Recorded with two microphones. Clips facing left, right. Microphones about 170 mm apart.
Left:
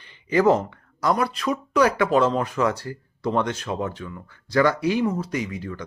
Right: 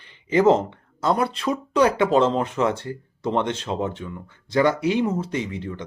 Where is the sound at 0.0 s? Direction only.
25° right (ahead or behind).